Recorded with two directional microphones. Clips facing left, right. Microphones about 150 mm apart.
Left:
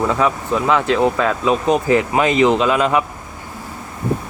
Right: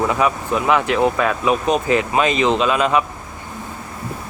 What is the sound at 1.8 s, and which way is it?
Speech, 20° right (ahead or behind).